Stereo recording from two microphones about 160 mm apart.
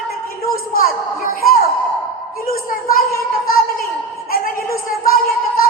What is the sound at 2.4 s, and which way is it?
Speech, 65° left (ahead or behind).